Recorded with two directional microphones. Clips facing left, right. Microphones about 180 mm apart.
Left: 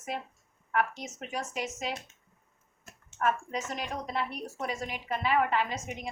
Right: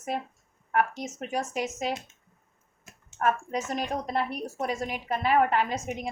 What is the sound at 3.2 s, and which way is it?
A woman's voice, 45° right (ahead or behind).